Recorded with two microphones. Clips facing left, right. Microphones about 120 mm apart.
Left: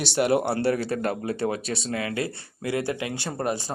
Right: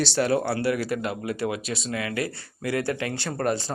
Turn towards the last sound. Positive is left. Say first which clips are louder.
# right 2 dB
turn(degrees=15)  # may be behind; listen again after turning